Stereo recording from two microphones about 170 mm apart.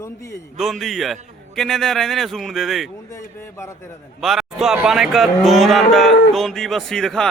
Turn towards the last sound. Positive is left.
turn(degrees=5)  # may be behind; listen again after turning